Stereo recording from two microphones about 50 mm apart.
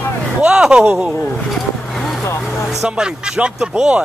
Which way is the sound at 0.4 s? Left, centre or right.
Centre.